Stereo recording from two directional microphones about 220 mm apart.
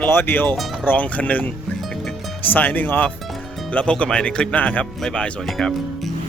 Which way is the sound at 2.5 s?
10° left (ahead or behind).